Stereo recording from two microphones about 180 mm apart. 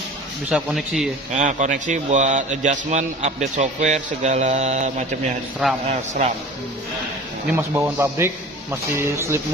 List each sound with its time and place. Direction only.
0.5 s speech: centre (ahead or behind)
1.3 s a man's voice: 45° right (ahead or behind)
7.5 s speech: 15° right (ahead or behind)